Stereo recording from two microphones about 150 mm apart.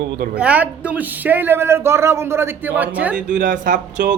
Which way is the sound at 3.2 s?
60° right (ahead or behind).